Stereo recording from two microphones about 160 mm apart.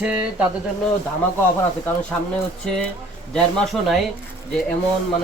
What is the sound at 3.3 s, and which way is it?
Speech, centre (ahead or behind).